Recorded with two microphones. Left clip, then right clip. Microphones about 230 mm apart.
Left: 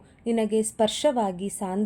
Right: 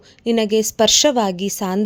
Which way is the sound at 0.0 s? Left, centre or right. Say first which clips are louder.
Right 7 dB; right.